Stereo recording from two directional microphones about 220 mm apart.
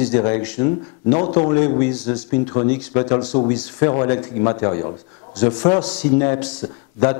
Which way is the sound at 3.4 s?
25° left (ahead or behind).